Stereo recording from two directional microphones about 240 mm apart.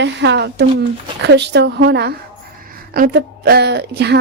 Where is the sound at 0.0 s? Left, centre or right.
Right.